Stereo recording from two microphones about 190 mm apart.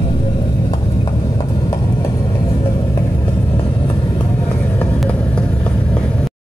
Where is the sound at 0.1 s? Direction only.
30° left (ahead or behind).